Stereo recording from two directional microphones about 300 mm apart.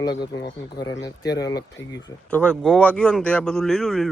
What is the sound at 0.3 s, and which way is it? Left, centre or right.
Speech, left.